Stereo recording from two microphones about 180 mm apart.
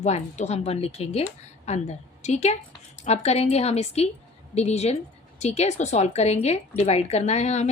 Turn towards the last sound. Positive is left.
turn(degrees=40)  # may be behind; listen again after turning